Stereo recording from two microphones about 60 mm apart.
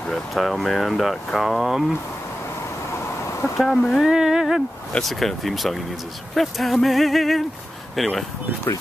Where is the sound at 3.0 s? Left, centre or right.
Left.